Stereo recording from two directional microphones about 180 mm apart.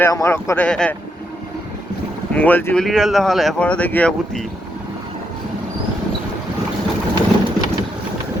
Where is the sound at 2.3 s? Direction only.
10° left (ahead or behind).